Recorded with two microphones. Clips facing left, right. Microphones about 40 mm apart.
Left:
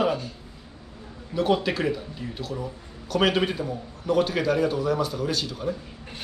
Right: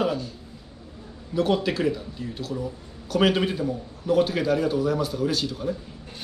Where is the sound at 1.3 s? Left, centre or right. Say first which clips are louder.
Even; centre.